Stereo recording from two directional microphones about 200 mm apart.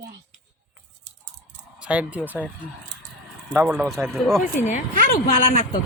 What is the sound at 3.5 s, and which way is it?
Speech, 5° right (ahead or behind).